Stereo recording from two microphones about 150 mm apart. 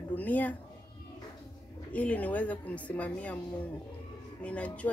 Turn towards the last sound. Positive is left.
turn(degrees=10)  # may be behind; listen again after turning